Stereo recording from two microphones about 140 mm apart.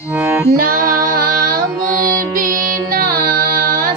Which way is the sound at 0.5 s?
90° right.